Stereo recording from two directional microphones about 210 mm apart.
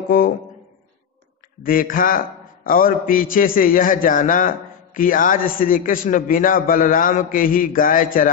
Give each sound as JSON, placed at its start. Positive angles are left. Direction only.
{"t": 1.6, "sound": "a man's voice", "side_deg": 40}